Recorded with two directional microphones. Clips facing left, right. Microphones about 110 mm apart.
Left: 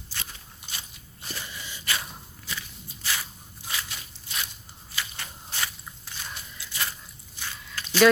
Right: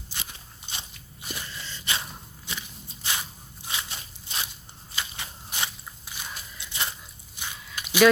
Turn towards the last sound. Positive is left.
turn(degrees=-15)  # may be behind; listen again after turning